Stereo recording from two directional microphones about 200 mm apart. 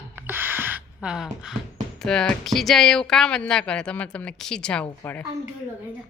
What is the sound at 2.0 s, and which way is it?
Speech, 5° left (ahead or behind).